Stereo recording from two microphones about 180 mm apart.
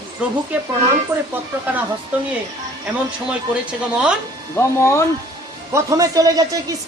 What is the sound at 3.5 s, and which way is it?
Speech, 5° right (ahead or behind).